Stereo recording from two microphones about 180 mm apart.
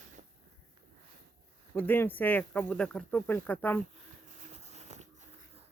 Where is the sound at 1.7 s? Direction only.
10° left (ahead or behind).